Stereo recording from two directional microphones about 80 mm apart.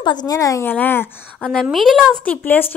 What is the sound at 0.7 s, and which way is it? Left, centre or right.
Speech, left.